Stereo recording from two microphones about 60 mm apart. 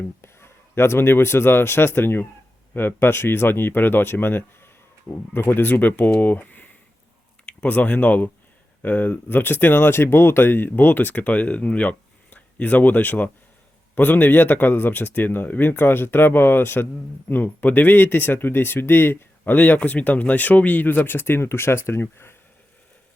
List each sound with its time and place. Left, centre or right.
0.2 s speech: left